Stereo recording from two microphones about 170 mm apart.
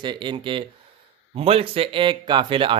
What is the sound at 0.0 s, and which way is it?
A man's voice, 25° right (ahead or behind).